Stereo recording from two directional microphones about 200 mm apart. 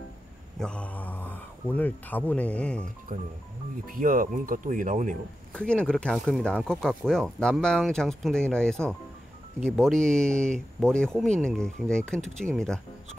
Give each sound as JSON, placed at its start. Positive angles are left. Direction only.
{"t": 0.6, "sound": "speech", "side_deg": 5}
{"t": 3.1, "sound": "speech", "side_deg": -40}
{"t": 5.5, "sound": "speech", "side_deg": 5}